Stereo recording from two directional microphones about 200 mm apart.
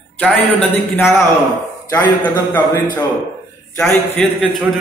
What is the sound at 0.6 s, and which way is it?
A man's voice, 10° left (ahead or behind).